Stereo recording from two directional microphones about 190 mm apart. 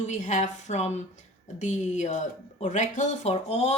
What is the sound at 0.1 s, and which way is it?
Speech, 40° left (ahead or behind).